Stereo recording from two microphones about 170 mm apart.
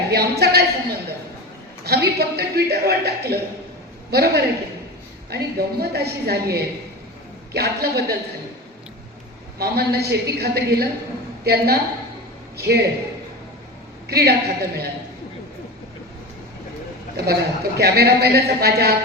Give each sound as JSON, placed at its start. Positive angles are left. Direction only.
{"t": 0.1, "sound": "a woman's voice", "side_deg": -70}
{"t": 9.6, "sound": "a man's voice", "side_deg": -70}
{"t": 14.1, "sound": "a man's voice", "side_deg": -70}
{"t": 17.2, "sound": "a man's voice", "side_deg": -65}